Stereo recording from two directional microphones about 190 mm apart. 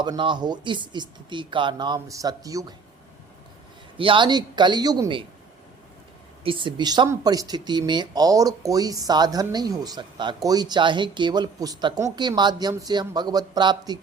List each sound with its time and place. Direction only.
0.0 s speech: 25° right (ahead or behind)
3.9 s speech: 25° right (ahead or behind)
6.4 s speech: 25° right (ahead or behind)